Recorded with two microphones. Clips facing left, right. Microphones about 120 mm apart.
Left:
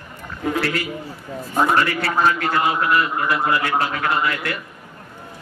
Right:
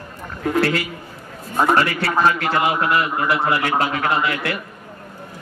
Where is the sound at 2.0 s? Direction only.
35° right (ahead or behind).